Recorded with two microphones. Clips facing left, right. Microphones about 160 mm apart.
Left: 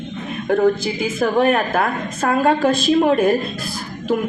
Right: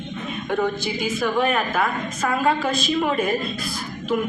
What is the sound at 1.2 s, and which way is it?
A woman's voice, 45° left (ahead or behind).